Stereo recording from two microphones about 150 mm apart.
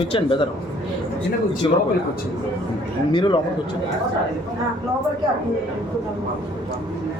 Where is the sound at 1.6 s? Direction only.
35° left (ahead or behind).